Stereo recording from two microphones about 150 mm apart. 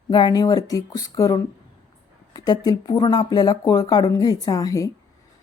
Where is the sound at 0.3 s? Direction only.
25° left (ahead or behind).